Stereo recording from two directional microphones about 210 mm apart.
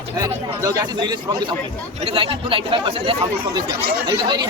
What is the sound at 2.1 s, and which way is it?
Speech, 25° right (ahead or behind).